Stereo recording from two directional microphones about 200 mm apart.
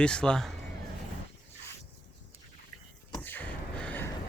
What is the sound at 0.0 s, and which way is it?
Speech, 5° left (ahead or behind).